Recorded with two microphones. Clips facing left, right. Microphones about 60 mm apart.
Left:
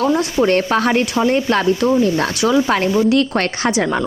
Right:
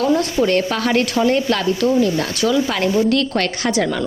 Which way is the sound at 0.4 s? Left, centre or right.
Left.